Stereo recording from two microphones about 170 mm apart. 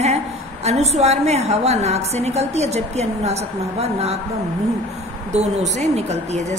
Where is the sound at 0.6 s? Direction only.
40° right (ahead or behind).